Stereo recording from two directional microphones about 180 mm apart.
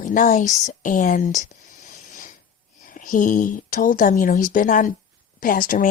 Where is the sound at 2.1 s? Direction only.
40° left (ahead or behind).